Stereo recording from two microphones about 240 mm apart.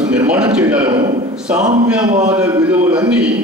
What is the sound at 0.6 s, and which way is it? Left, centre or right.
Speech, centre.